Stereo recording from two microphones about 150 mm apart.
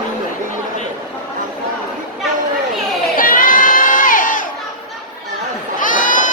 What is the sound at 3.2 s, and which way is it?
Crowd, 65° left (ahead or behind).